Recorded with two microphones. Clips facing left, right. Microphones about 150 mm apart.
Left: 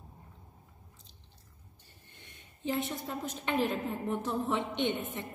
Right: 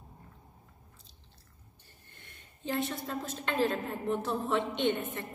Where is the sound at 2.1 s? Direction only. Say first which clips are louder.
Even; 20° left (ahead or behind).